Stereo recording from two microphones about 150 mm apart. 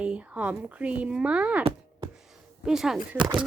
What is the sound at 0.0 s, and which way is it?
Speech, 10° right (ahead or behind).